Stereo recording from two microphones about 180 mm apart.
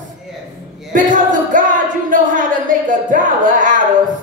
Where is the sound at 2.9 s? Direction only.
45° right (ahead or behind).